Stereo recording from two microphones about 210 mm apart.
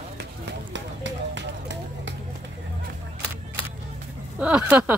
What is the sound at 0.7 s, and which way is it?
Run, 60° right (ahead or behind).